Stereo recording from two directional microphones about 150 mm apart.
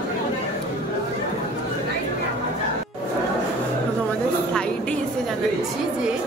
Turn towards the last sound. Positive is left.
turn(degrees=5)  # may be behind; listen again after turning